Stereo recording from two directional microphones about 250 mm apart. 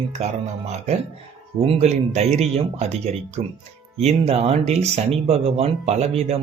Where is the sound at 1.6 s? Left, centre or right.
Right.